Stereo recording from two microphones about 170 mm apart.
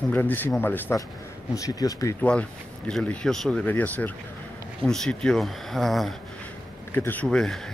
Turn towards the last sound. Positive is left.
turn(degrees=5)  # may be behind; listen again after turning